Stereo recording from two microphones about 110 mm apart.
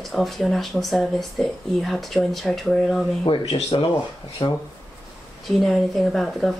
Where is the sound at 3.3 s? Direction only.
55° left (ahead or behind).